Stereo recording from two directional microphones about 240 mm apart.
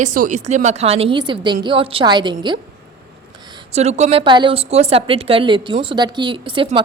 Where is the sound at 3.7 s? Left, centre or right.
Right.